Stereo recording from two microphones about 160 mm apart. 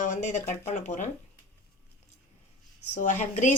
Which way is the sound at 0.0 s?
50° left (ahead or behind).